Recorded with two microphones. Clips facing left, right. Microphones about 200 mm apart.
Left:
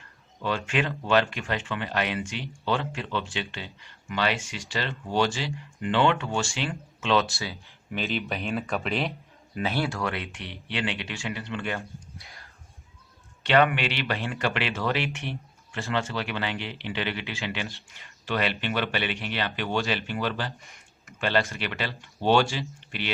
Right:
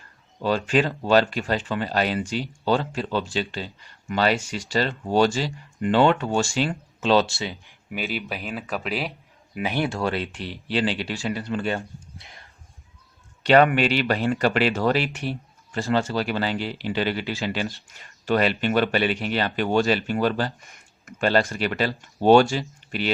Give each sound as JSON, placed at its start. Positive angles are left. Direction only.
{"t": 0.4, "sound": "speech", "side_deg": -35}
{"t": 7.9, "sound": "speech", "side_deg": -5}
{"t": 9.6, "sound": "speech", "side_deg": -15}
{"t": 13.4, "sound": "speech", "side_deg": -40}